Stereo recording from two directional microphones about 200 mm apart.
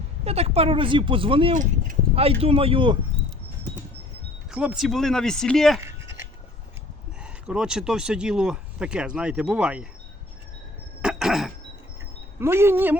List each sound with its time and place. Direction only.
0.3 s speech: 30° right (ahead or behind)
4.5 s speech: 5° right (ahead or behind)
7.4 s speech: 5° right (ahead or behind)
11.0 s cough: 5° right (ahead or behind)
12.4 s speech: 10° right (ahead or behind)